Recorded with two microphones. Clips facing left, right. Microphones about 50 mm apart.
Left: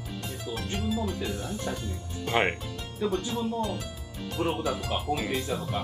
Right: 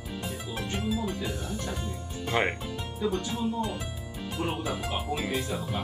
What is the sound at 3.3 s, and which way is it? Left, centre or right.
Speech, centre.